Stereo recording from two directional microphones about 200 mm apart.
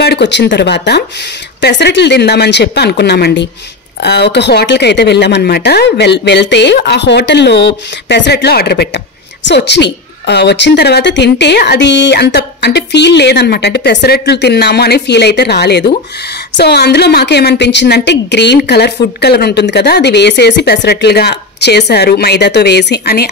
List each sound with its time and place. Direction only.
0.0 s a woman's voice: 55° left (ahead or behind)